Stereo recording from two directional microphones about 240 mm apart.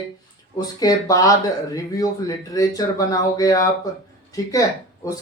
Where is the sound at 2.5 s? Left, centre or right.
Centre.